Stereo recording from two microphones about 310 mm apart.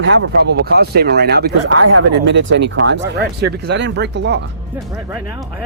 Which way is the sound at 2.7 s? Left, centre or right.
Right.